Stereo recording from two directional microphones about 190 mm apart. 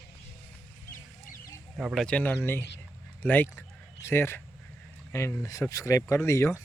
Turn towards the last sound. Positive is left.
turn(degrees=15)  # may be behind; listen again after turning